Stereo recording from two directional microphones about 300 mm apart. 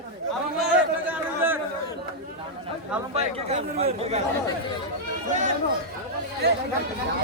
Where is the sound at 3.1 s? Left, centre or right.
Right.